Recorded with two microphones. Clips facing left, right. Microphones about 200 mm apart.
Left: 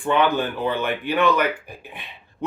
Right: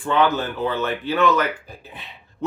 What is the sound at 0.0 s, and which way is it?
Speech, 15° left (ahead or behind).